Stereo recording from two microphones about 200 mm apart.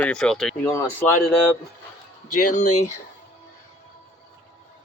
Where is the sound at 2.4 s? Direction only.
40° left (ahead or behind).